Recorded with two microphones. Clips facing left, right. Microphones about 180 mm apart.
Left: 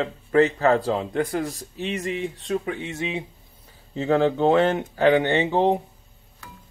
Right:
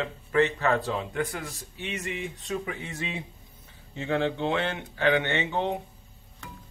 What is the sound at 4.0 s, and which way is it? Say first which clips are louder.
Speech: left 7 dB; 40° left (ahead or behind).